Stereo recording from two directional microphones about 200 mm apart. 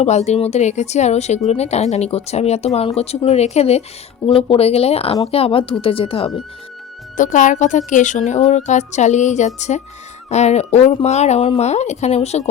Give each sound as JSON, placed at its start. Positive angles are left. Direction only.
{"t": 0.0, "sound": "speech", "side_deg": 35}
{"t": 7.2, "sound": "speech", "side_deg": 40}